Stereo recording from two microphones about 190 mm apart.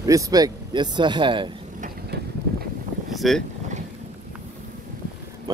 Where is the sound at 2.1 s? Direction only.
60° right (ahead or behind).